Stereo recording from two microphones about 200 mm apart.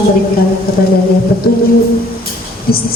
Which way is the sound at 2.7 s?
50° left (ahead or behind).